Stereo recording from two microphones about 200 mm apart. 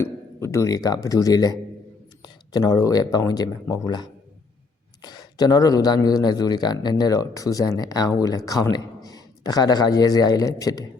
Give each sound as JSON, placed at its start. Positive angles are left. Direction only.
{"t": 0.0, "sound": "a man's voice", "side_deg": 10}